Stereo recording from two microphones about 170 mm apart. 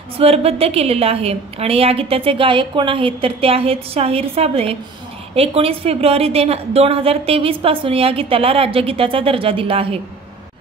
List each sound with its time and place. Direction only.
0.2 s a woman's voice: 35° right (ahead or behind)